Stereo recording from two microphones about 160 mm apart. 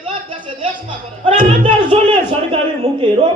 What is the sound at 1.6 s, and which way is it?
Speech, 35° right (ahead or behind).